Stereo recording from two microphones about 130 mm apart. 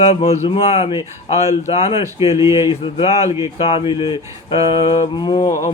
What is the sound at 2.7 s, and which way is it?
Speech, 50° left (ahead or behind).